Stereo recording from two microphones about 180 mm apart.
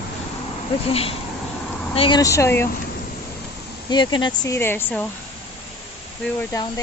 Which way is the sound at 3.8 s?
25° left (ahead or behind).